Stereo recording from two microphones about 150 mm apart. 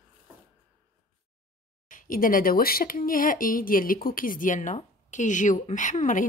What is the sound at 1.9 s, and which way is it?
Speech, 65° left (ahead or behind).